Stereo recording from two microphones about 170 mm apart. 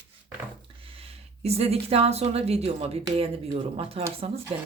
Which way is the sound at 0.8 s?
35° right (ahead or behind).